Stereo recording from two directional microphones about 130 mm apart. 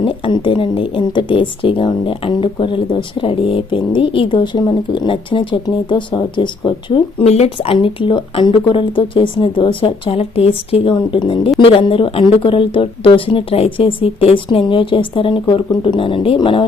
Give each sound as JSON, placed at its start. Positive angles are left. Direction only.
{"t": 0.0, "sound": "speech", "side_deg": 35}